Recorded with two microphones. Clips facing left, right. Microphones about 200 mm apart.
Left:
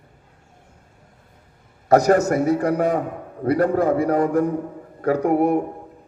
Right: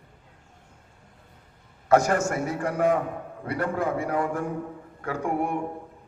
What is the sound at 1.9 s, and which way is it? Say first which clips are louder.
A man's voice: left 6 dB; 40° left (ahead or behind).